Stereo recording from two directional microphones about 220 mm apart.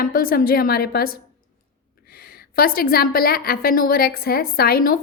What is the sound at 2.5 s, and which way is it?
A woman's voice, 45° left (ahead or behind).